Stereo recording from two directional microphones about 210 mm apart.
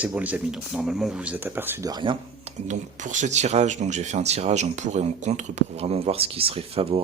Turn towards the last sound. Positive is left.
turn(degrees=-30)  # may be behind; listen again after turning